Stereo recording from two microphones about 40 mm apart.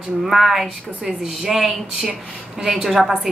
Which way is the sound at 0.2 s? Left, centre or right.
Centre.